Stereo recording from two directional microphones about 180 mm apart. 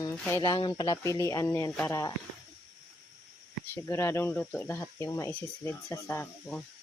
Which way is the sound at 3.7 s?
15° left (ahead or behind).